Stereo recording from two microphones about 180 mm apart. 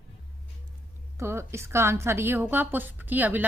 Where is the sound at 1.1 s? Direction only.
15° right (ahead or behind).